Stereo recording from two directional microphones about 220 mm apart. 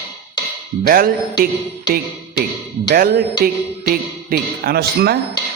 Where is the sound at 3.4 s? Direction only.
40° right (ahead or behind).